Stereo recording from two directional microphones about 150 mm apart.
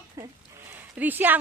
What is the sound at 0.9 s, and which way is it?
Speech, 10° right (ahead or behind).